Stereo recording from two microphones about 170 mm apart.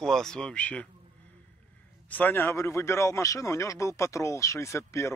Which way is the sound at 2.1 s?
10° left (ahead or behind).